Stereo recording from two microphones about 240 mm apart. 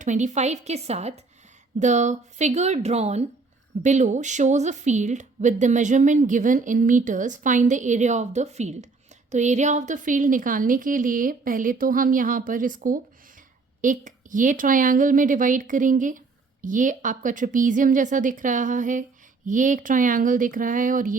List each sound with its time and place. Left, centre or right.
0.0 s a woman's voice: right